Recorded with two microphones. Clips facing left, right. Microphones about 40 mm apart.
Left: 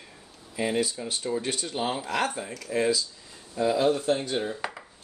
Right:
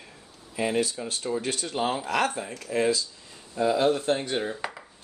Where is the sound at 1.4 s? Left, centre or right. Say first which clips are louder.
Right 2 dB; right.